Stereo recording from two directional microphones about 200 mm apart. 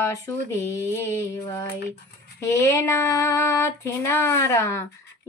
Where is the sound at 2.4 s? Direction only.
15° left (ahead or behind).